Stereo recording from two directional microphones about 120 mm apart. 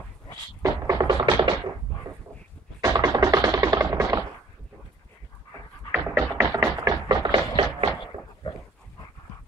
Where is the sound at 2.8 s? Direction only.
30° right (ahead or behind).